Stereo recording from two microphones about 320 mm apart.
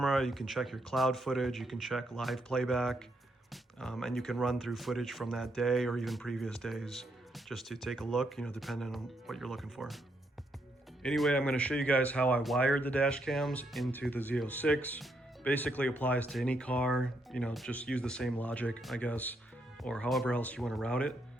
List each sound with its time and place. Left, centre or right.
0.0 s speech: centre
11.0 s speech: centre